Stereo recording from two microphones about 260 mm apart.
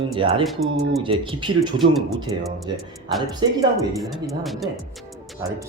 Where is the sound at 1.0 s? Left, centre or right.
Centre.